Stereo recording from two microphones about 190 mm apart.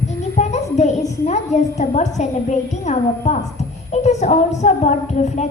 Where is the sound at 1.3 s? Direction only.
35° left (ahead or behind).